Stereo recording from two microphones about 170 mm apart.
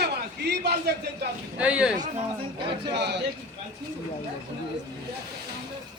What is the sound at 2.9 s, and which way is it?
Speech, 85° right.